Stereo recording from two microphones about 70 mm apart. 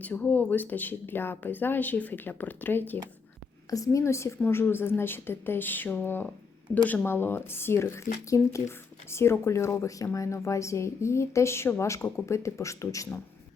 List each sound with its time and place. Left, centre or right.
0.0 s speech: left
3.7 s speech: left